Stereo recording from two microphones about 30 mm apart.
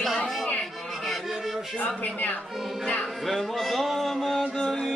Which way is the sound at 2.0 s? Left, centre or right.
Left.